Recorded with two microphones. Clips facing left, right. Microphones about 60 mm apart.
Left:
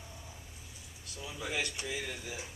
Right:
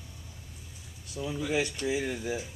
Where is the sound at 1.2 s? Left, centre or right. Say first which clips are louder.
Right 7 dB; centre.